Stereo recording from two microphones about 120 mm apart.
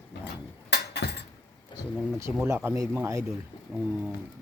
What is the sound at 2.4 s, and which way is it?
Speech, 25° right (ahead or behind).